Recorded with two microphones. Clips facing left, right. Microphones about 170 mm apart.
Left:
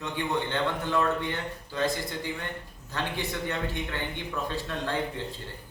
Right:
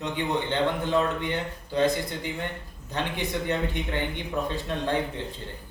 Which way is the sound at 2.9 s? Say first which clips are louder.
Right 3 dB; 20° right (ahead or behind).